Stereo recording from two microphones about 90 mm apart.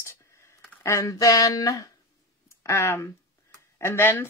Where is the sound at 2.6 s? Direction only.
30° left (ahead or behind).